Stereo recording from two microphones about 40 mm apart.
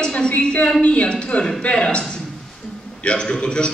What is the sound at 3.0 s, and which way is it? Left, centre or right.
Speech, left.